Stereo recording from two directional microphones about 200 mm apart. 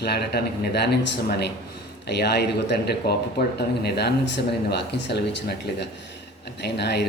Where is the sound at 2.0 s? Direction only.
55° left (ahead or behind).